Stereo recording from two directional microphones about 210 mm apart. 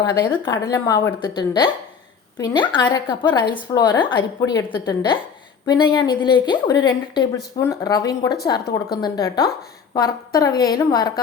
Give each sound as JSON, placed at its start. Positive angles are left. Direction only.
{"t": 0.0, "sound": "a woman's voice", "side_deg": 15}